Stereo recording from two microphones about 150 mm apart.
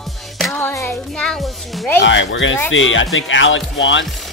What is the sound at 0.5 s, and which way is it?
A woman's voice, 15° left (ahead or behind).